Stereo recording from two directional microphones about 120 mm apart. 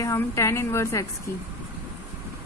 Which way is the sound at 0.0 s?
25° left (ahead or behind).